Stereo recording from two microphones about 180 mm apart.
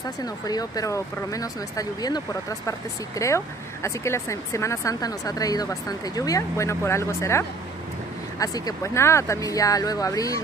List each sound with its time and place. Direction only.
0.2 s speech: 20° left (ahead or behind)